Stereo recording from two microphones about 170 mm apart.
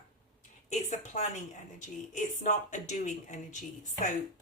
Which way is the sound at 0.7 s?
40° left (ahead or behind).